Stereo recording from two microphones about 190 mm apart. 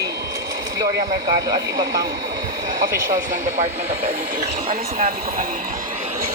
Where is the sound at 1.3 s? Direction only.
20° right (ahead or behind).